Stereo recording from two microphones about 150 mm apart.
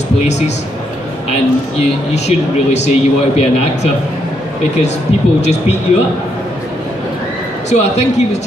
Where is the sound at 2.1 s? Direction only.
50° left (ahead or behind).